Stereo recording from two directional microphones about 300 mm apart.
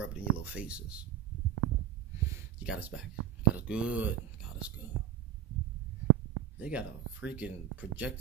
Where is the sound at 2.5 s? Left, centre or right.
Centre.